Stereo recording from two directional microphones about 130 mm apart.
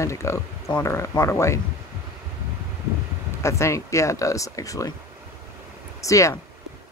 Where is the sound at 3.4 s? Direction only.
20° left (ahead or behind).